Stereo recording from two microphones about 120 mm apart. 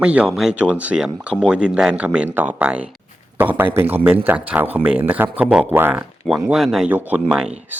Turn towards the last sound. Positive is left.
turn(degrees=-10)  # may be behind; listen again after turning